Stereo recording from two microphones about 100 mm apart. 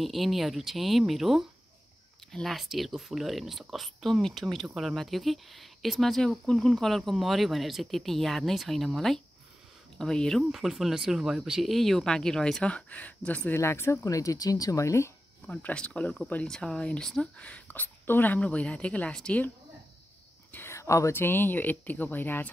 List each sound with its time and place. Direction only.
0.0 s speech: centre (ahead or behind); by 13.6 s 15° left (ahead or behind)
13.6 s speech: 25° left (ahead or behind)
15.4 s speech: 10° left (ahead or behind)
20.5 s speech: 25° left (ahead or behind)